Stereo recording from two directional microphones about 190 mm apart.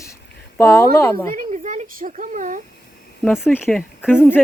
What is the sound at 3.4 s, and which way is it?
Speech, 10° left (ahead or behind).